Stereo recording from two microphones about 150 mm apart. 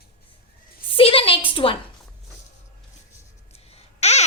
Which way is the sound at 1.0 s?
40° left (ahead or behind).